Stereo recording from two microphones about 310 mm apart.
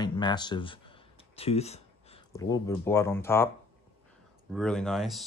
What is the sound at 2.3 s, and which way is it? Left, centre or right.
Speech, centre.